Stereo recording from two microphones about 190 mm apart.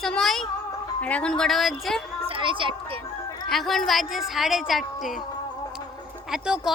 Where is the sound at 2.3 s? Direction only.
25° right (ahead or behind).